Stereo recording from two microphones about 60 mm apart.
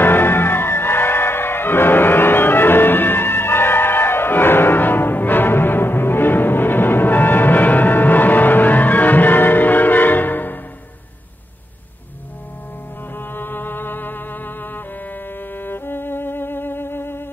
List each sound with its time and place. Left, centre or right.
0.0 s music: left
13.1 s music: left